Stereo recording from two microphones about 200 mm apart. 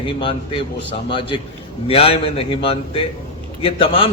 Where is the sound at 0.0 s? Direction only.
25° left (ahead or behind).